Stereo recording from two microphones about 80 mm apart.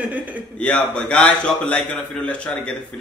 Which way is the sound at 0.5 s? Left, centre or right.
Centre.